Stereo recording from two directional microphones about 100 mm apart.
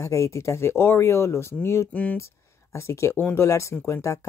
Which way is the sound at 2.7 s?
25° left (ahead or behind).